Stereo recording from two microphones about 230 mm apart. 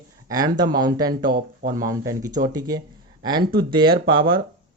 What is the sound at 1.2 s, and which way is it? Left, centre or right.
Speech, right.